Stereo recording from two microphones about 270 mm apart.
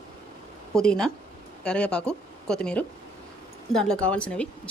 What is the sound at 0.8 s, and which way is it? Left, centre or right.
Speech, centre.